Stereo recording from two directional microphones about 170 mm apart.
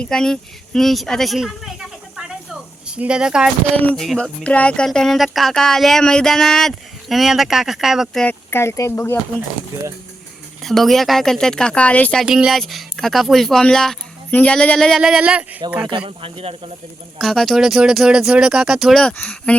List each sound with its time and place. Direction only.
0.0 s speech: 5° left (ahead or behind)
10.6 s speech: centre (ahead or behind)
12.2 s speech: 5° right (ahead or behind)
15.9 s speech: 30° right (ahead or behind)
17.2 s speech: centre (ahead or behind)